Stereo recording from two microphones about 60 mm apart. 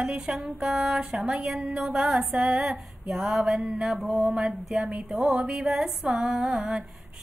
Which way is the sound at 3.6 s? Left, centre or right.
Centre.